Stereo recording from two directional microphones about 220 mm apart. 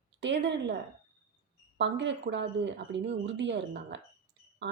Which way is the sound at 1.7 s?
55° right (ahead or behind).